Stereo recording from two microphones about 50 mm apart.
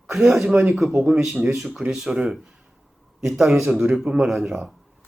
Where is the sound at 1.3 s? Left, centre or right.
Right.